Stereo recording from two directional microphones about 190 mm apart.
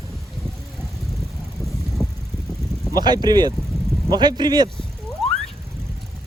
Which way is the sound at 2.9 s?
20° right (ahead or behind).